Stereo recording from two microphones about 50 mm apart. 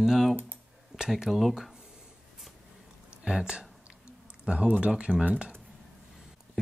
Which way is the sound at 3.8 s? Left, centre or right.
Right.